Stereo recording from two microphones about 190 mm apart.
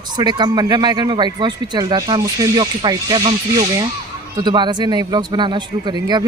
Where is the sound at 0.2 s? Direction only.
20° right (ahead or behind).